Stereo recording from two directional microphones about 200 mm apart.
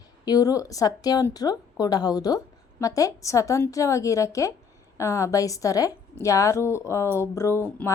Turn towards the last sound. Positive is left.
turn(degrees=10)  # may be behind; listen again after turning